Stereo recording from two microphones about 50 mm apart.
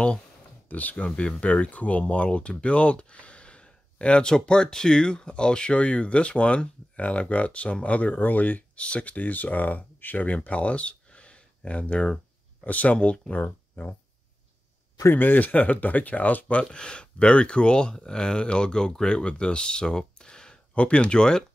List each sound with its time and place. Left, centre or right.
0.7 s speech: left
13.4 s speech: left
15.1 s speech: left
16.7 s speech: centre